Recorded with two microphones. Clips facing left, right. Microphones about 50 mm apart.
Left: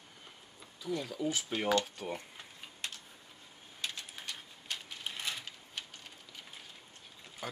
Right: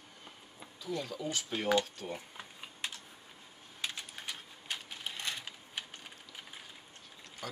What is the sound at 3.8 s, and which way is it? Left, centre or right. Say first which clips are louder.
Typing: right 1 dB; centre.